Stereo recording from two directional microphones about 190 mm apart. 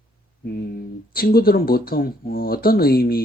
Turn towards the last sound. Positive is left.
turn(degrees=50)  # may be behind; listen again after turning